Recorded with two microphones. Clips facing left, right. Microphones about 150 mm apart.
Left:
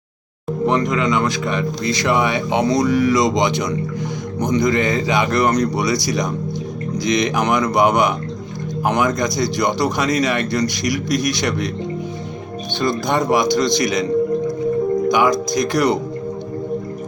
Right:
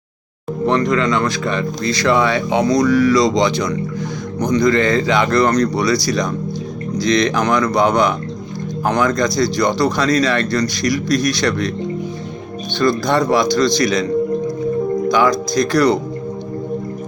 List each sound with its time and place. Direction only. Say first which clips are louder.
0.6 s speech: right 2 dB; 15° left (ahead or behind)
12.8 s speech: right 3 dB; 15° left (ahead or behind)
15.1 s speech: right 1 dB; 15° left (ahead or behind)